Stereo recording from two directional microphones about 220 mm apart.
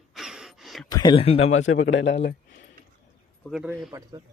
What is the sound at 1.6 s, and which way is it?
Speech, 65° left (ahead or behind).